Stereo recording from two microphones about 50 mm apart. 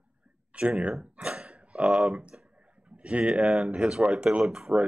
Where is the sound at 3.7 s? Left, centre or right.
Right.